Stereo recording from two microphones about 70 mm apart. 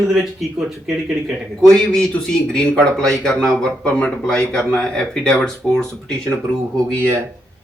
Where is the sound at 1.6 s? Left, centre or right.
Centre.